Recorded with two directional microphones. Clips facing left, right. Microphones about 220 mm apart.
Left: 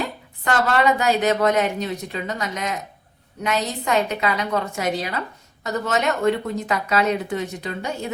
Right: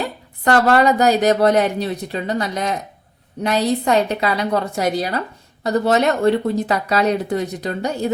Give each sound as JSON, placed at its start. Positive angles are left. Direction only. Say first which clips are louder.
{"t": 0.0, "sound": "speech", "louder": "right 5 dB", "side_deg": -35}